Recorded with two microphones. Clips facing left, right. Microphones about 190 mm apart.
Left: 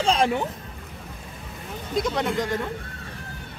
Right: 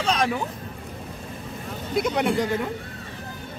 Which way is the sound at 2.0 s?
10° right (ahead or behind).